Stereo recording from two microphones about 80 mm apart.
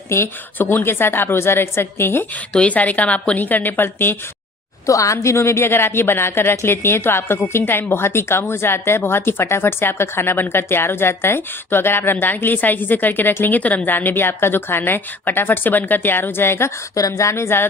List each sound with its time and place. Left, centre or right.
0.1 s a woman's voice: left
2.5 s a woman's voice: centre
4.9 s a woman's voice: left